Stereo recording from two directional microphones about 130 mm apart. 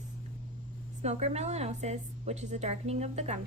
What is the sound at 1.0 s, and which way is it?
A woman's voice, 55° right (ahead or behind).